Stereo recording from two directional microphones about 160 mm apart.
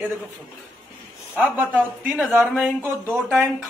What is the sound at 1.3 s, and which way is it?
A man's voice, 10° right (ahead or behind).